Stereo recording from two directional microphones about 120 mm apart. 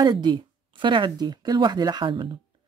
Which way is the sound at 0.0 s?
35° right (ahead or behind).